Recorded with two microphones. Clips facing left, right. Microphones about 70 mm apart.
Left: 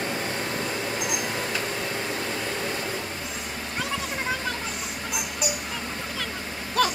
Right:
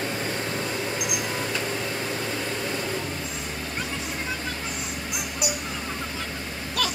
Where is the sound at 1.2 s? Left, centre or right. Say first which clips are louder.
Even; centre.